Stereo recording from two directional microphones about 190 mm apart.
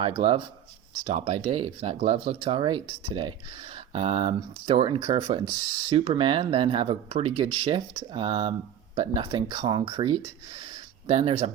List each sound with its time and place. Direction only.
0.0 s speech: 30° right (ahead or behind)